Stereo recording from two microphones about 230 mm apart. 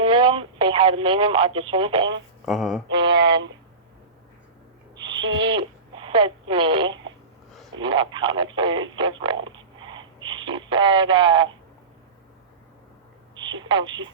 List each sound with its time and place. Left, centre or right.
0.0 s telephone: right
2.5 s speech: centre
2.9 s speech: right
5.0 s owl: right
5.5 s speech: right
13.6 s speech: centre